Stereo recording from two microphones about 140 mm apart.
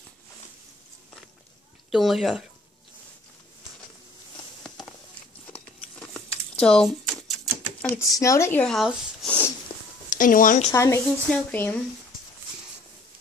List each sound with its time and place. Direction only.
1.9 s speech: centre (ahead or behind)
5.5 s a sound: 5° left (ahead or behind)
6.5 s typewriter: 5° left (ahead or behind)
7.9 s speech: 20° left (ahead or behind)
8.7 s speech: centre (ahead or behind)
10.0 s speech: 70° left (ahead or behind)
10.7 s speech: 20° left (ahead or behind)
11.2 s speech: 10° left (ahead or behind)